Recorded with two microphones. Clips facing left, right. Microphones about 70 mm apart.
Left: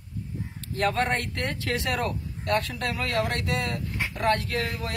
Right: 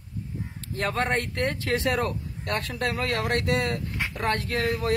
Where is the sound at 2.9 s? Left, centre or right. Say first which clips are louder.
Even; right.